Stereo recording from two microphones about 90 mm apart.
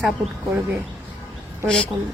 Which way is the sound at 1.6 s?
10° left (ahead or behind).